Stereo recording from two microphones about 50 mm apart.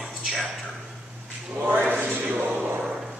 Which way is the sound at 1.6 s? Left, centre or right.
Right.